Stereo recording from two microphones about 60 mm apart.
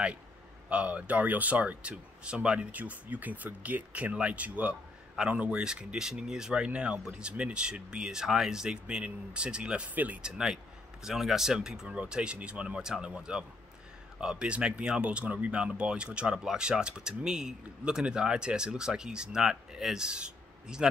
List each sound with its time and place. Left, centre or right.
0.7 s speech: right
10.2 s speech: centre